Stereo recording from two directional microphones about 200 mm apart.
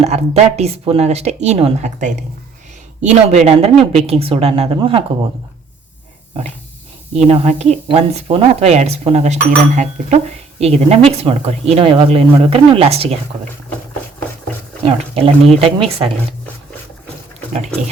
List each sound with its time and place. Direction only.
0.0 s a woman's voice: 30° right (ahead or behind)
7.3 s a woman's voice: 30° right (ahead or behind)
14.8 s speech: 30° right (ahead or behind)
17.5 s a woman's voice: 35° right (ahead or behind)